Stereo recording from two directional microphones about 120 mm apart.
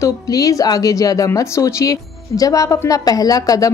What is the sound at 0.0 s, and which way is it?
A woman's voice, 30° left (ahead or behind).